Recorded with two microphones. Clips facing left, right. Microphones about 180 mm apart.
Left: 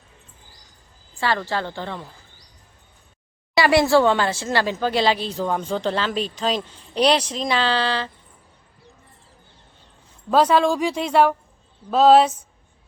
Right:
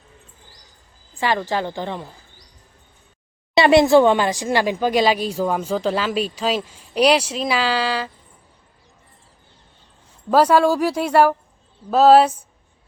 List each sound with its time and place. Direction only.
1.2 s speech: 15° right (ahead or behind)
3.5 s speech: 20° right (ahead or behind)
10.3 s speech: 10° right (ahead or behind)